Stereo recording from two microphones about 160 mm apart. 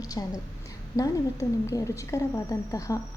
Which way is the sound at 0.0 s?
20° left (ahead or behind).